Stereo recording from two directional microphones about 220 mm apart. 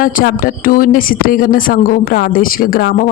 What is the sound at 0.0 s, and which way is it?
A man's voice, 40° left (ahead or behind).